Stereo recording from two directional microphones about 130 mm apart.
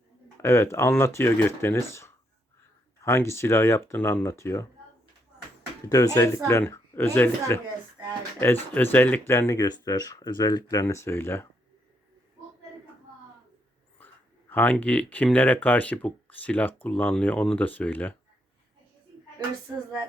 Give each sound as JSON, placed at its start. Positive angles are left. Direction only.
{"t": 0.4, "sound": "speech", "side_deg": 20}
{"t": 5.9, "sound": "speech", "side_deg": 25}
{"t": 14.5, "sound": "speech", "side_deg": 10}